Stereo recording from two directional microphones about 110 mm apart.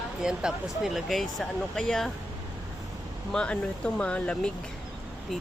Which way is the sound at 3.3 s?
10° left (ahead or behind).